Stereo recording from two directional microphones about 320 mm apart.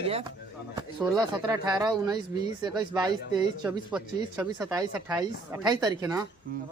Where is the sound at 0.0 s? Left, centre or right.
Centre.